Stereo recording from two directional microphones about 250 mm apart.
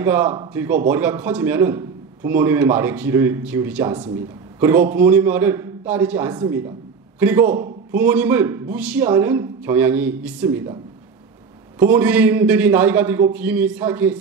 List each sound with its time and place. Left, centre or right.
0.0 s a man's voice: centre
6.3 s a woman's voice: centre
11.8 s a man's voice: centre